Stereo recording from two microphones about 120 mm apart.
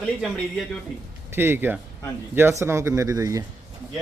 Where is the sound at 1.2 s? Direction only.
20° right (ahead or behind).